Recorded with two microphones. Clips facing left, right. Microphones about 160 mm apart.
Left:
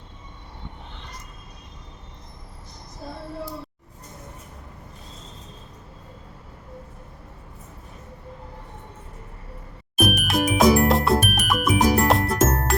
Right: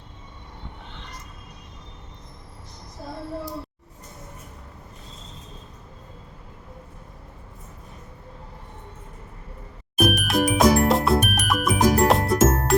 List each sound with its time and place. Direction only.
10.0 s music: 5° left (ahead or behind)